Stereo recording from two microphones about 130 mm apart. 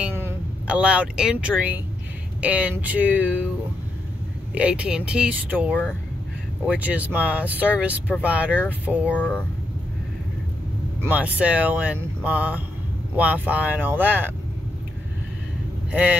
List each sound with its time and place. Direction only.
0.0 s speech: 15° right (ahead or behind)
4.6 s speech: 10° right (ahead or behind)
11.0 s speech: 10° right (ahead or behind)
15.9 s speech: 10° right (ahead or behind)